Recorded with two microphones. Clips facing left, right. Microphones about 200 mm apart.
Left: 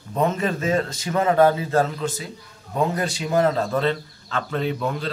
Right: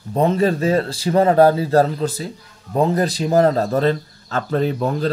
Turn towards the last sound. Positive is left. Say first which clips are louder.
# right 6 dB
turn(degrees=-40)  # may be behind; listen again after turning